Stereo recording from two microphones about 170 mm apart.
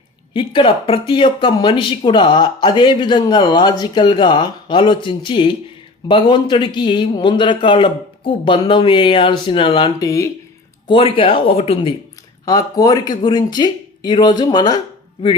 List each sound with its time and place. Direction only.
0.3 s speech: 30° left (ahead or behind)
10.8 s speech: 30° left (ahead or behind)
12.5 s speech: 20° left (ahead or behind)